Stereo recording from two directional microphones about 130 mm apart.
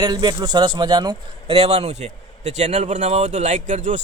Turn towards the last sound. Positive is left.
turn(degrees=-70)  # may be behind; listen again after turning